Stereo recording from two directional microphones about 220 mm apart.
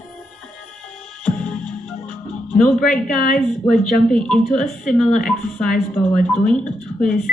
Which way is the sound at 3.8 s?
Centre (ahead or behind).